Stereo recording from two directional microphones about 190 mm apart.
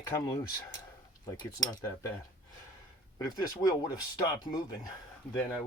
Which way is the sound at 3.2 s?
20° left (ahead or behind).